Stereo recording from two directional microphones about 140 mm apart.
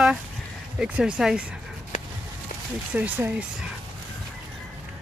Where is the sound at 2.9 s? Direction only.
10° right (ahead or behind).